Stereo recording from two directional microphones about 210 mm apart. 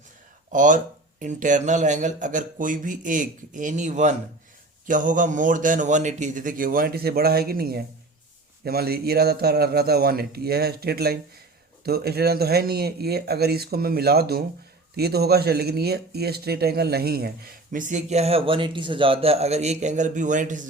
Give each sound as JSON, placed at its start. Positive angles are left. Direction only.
{"t": 0.5, "sound": "a man's voice", "side_deg": -40}